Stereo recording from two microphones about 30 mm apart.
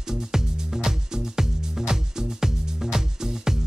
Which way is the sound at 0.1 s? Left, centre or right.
Centre.